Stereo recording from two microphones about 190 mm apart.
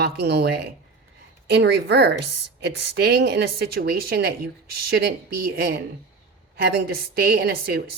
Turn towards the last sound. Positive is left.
turn(degrees=-55)  # may be behind; listen again after turning